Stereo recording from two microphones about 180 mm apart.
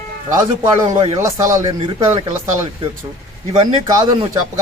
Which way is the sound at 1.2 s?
15° right (ahead or behind).